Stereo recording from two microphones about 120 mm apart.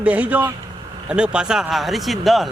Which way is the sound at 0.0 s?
10° right (ahead or behind).